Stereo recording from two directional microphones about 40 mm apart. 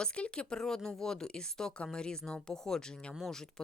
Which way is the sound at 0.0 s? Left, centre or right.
Left.